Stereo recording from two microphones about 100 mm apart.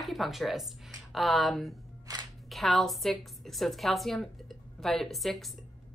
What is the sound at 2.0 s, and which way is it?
Music, 40° right (ahead or behind).